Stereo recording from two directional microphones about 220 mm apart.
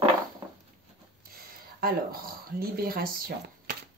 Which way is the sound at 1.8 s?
45° right (ahead or behind).